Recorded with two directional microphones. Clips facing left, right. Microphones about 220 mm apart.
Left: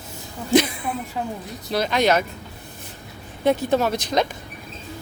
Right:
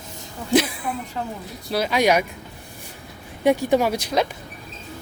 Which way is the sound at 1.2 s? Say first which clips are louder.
Left 1 dB; 10° left (ahead or behind).